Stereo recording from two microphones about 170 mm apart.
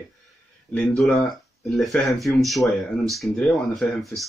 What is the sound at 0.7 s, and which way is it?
Speech, 5° left (ahead or behind).